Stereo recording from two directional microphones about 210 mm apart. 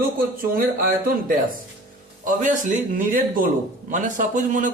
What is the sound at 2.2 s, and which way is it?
A man's voice, 35° right (ahead or behind).